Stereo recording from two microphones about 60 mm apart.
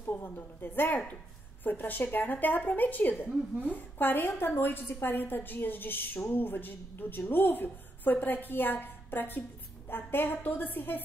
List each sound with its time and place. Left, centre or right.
0.0 s a woman's voice: left